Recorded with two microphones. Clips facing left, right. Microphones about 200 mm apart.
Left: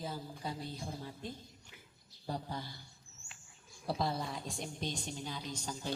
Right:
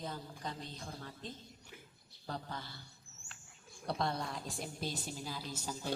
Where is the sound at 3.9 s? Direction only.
Centre (ahead or behind).